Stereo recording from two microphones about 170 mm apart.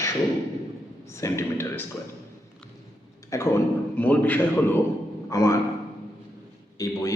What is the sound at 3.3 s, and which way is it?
A man's voice, 15° left (ahead or behind).